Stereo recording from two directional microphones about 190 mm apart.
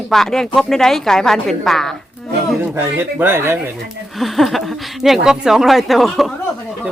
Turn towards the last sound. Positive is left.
turn(degrees=0)  # may be behind; listen again after turning